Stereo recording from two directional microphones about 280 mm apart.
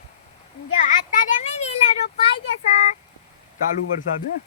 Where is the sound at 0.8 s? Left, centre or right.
Left.